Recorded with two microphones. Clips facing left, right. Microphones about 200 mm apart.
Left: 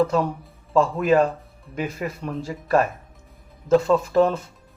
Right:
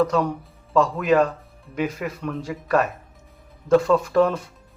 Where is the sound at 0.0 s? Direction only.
5° left (ahead or behind).